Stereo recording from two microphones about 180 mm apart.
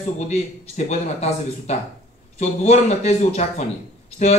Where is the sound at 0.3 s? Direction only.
35° left (ahead or behind).